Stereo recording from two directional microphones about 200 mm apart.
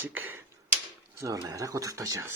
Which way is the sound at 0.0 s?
10° right (ahead or behind).